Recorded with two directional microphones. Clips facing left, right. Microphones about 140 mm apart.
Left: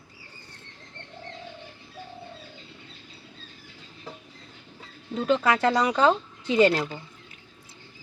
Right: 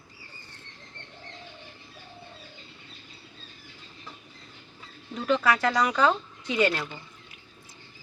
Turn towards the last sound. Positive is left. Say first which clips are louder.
# left 5 dB
turn(degrees=35)  # may be behind; listen again after turning